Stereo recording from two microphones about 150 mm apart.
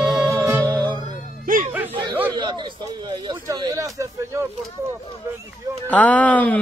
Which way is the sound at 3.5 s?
20° right (ahead or behind).